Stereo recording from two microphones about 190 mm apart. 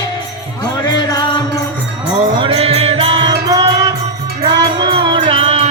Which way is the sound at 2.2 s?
25° right (ahead or behind).